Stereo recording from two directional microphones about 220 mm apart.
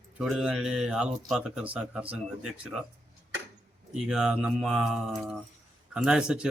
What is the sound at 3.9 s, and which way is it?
A man's voice, 5° right (ahead or behind).